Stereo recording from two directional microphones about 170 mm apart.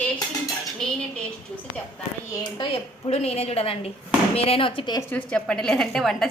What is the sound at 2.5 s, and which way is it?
A woman's voice, 35° left (ahead or behind).